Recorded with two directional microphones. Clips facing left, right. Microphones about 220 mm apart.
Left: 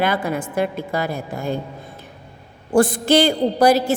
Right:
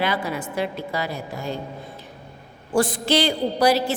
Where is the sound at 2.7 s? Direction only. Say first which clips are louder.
Left 5 dB; 50° left (ahead or behind).